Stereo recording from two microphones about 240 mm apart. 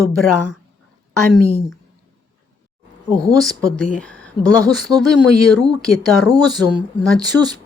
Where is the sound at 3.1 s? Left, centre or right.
Centre.